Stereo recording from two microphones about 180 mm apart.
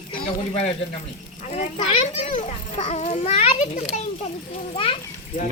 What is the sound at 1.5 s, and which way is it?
A child's voice, 35° left (ahead or behind).